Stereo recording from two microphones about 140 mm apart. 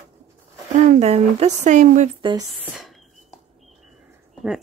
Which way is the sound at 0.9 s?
50° right (ahead or behind).